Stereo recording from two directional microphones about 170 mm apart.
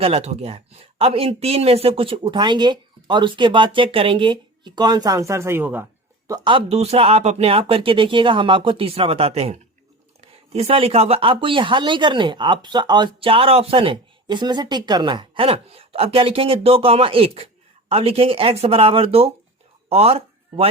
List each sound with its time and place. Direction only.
0.0 s speech: 35° right (ahead or behind); by 5.8 s 10° right (ahead or behind)
6.2 s speech: 25° right (ahead or behind)